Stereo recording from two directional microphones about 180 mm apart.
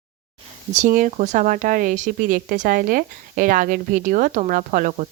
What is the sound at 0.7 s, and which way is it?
A woman's voice, 45° right (ahead or behind).